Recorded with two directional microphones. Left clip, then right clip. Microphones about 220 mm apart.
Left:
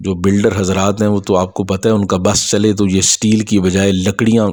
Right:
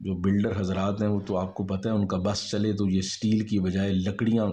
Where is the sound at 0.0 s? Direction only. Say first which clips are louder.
Left 14 dB; 50° left (ahead or behind).